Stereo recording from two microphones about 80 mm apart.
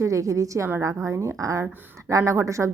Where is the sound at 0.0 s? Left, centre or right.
Right.